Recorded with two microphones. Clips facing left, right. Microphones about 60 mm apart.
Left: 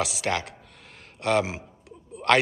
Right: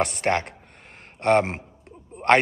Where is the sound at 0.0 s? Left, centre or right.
Right.